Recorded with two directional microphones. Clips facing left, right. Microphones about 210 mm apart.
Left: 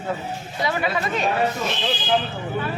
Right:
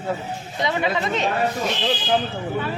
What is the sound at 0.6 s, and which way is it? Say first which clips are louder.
Speech: right 1 dB; 20° right (ahead or behind).